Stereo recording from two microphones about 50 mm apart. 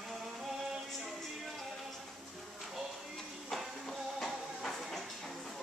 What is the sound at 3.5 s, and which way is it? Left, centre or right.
Music, centre.